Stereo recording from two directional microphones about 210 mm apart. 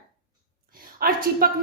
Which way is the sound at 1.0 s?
45° right (ahead or behind).